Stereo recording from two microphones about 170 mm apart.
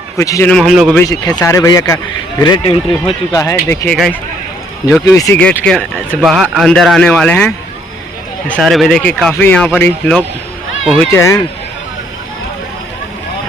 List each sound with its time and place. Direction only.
0.2 s a man's voice: 15° left (ahead or behind)
0.5 s speech: centre (ahead or behind)
0.9 s speech: 20° left (ahead or behind)
3.8 s speech: 5° left (ahead or behind)
5.0 s a man's voice: 20° left (ahead or behind)
5.4 s speech: 5° left (ahead or behind)
11.1 s a man's voice: 15° left (ahead or behind)